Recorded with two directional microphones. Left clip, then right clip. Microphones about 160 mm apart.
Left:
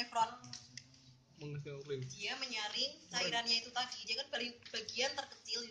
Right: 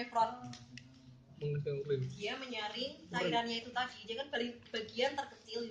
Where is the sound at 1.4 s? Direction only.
50° left (ahead or behind).